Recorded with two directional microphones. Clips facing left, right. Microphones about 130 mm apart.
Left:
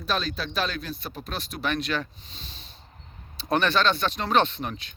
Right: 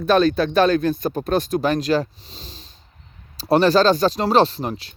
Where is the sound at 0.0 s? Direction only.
55° right (ahead or behind).